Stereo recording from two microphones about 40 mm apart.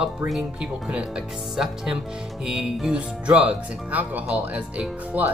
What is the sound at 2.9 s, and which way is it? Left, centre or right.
Speech, right.